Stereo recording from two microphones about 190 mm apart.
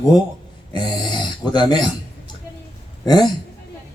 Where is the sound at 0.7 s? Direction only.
25° left (ahead or behind).